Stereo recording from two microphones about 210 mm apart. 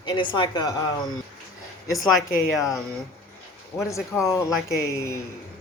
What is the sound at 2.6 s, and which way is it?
Speech, 15° left (ahead or behind).